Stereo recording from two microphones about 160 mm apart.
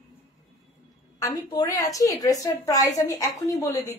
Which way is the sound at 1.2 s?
25° left (ahead or behind).